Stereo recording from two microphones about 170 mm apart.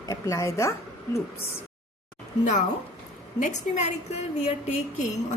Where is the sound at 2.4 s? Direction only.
45° left (ahead or behind).